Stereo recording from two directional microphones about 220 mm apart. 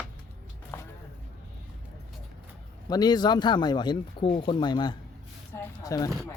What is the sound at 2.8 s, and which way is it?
Speech, 15° left (ahead or behind).